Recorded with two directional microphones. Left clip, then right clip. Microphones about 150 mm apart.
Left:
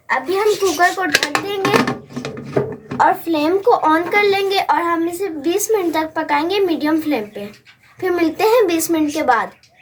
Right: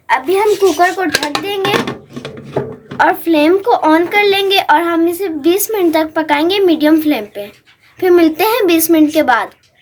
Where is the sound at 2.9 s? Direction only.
90° right.